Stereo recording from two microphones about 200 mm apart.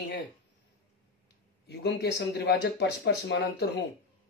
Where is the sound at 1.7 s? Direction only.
55° left (ahead or behind).